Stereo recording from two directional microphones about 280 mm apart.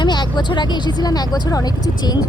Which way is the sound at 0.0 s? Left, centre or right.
Centre.